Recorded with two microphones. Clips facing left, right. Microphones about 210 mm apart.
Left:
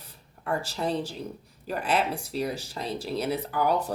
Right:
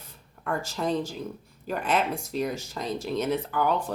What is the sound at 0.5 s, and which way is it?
Speech, 35° left (ahead or behind).